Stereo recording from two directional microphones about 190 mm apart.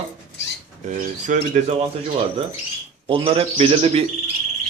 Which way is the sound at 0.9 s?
40° right (ahead or behind).